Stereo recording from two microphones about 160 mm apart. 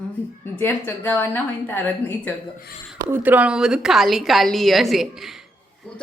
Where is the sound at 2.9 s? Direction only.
20° right (ahead or behind).